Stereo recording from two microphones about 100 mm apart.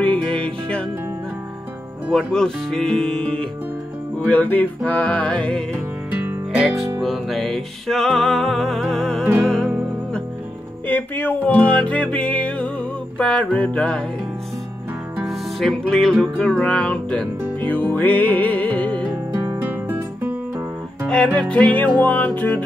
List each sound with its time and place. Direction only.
0.0 s music: 15° left (ahead or behind)
2.1 s music: 5° left (ahead or behind)
4.3 s music: 15° left (ahead or behind)
6.5 s music: 5° right (ahead or behind)
10.9 s music: 20° left (ahead or behind)
15.2 s music: 5° left (ahead or behind)
19.3 s music: 20° right (ahead or behind)
21.1 s music: 10° left (ahead or behind)